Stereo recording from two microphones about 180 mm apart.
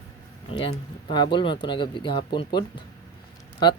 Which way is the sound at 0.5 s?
35° left (ahead or behind).